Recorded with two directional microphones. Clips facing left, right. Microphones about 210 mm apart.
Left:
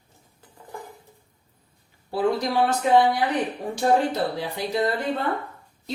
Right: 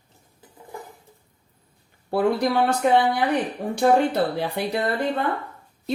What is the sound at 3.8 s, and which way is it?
Speech, 60° right (ahead or behind).